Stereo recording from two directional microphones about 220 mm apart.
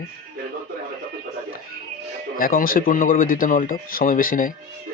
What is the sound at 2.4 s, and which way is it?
Speech, 40° left (ahead or behind).